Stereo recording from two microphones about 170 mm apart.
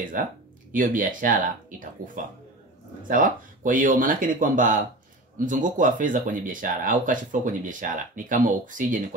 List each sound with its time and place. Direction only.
0.7 s speech: 50° right (ahead or behind)